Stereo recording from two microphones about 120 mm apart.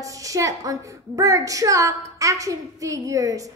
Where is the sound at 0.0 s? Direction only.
30° right (ahead or behind).